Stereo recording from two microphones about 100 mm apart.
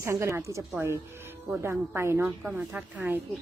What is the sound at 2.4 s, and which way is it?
Speech, 10° right (ahead or behind).